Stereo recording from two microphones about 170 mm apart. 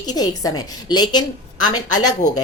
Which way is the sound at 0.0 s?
25° left (ahead or behind).